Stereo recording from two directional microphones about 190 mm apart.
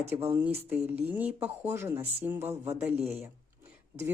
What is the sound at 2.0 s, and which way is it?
Speech, 30° right (ahead or behind).